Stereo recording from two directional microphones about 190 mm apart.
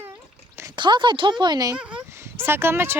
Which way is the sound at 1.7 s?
10° right (ahead or behind).